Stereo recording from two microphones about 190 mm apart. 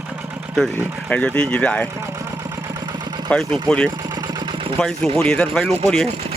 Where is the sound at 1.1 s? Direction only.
5° left (ahead or behind).